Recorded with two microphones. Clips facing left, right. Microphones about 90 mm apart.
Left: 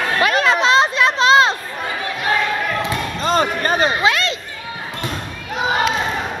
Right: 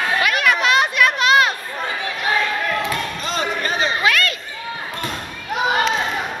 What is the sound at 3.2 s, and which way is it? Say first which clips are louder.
Basketball bounce: left 5 dB; 45° left (ahead or behind).